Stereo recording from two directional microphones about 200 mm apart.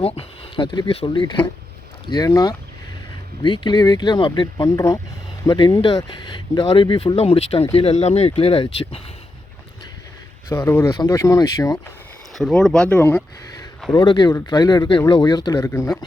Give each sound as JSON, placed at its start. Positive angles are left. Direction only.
{"t": 0.0, "sound": "speech", "side_deg": 30}
{"t": 10.5, "sound": "speech", "side_deg": 10}
{"t": 12.3, "sound": "speech", "side_deg": 0}
{"t": 13.9, "sound": "speech", "side_deg": 25}